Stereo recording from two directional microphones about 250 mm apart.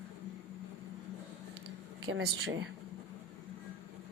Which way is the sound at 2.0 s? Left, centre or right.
Right.